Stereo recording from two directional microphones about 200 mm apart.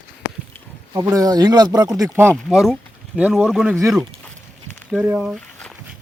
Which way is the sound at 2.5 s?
Centre (ahead or behind).